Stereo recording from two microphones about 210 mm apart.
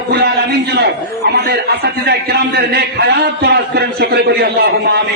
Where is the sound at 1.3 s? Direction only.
50° right (ahead or behind).